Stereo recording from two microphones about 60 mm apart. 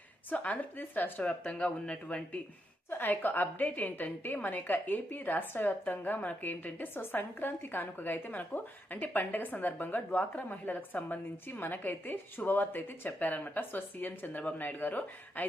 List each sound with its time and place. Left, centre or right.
0.3 s a woman's voice: left
1.3 s speech: left
3.0 s a woman's voice: left